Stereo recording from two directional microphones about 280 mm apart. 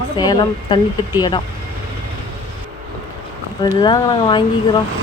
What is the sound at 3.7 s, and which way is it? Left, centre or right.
Speech, centre.